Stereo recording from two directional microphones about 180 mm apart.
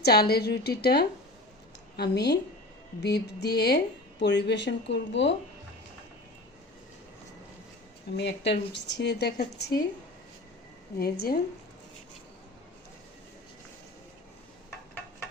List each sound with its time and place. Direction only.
0.0 s a woman's voice: 60° left (ahead or behind); by 5.3 s 80° left
8.1 s speech: 70° left (ahead or behind)
10.9 s a woman's voice: 60° left (ahead or behind)